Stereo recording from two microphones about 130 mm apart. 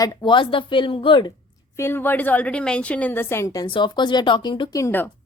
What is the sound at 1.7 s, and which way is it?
A woman's voice, 20° left (ahead or behind).